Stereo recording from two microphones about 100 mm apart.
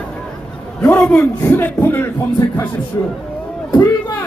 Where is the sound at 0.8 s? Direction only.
15° left (ahead or behind); by 3.1 s 30° left (ahead or behind).